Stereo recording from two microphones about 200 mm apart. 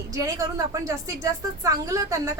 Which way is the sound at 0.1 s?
15° right (ahead or behind).